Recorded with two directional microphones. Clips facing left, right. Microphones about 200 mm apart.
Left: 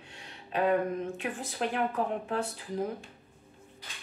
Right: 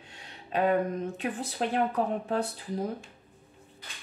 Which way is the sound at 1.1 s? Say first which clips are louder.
Right 3 dB; 40° right (ahead or behind).